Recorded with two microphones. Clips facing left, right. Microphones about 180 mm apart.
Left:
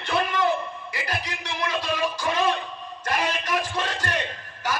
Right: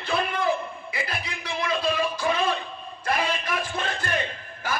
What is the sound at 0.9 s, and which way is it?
Music, 80° left.